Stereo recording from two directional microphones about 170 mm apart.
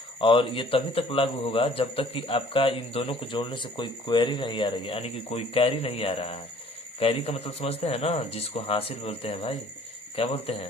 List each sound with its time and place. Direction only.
0.2 s a man's voice: 30° left (ahead or behind)